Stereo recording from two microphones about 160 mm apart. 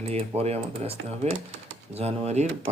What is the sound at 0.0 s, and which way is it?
Speech, 40° right (ahead or behind).